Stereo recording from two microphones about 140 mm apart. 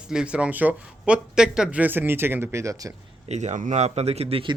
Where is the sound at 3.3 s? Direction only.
55° right (ahead or behind); by 4.6 s 40° right (ahead or behind).